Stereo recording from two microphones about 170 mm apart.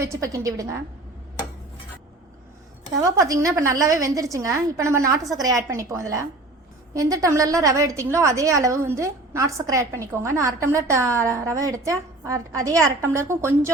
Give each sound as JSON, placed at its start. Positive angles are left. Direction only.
{"t": 0.0, "sound": "a woman's voice", "side_deg": -15}
{"t": 3.2, "sound": "a woman's voice", "side_deg": -20}